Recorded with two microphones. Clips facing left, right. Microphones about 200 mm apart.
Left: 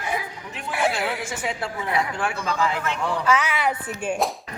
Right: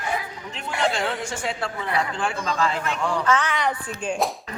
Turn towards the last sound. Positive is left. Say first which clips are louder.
# even
turn(degrees=5)  # may be behind; listen again after turning